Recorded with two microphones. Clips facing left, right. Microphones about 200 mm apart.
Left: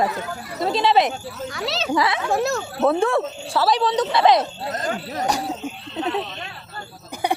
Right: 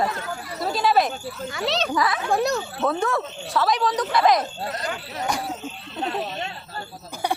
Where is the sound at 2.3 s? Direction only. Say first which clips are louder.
Right 1 dB; centre (ahead or behind).